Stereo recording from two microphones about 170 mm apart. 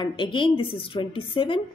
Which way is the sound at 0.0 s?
30° left (ahead or behind).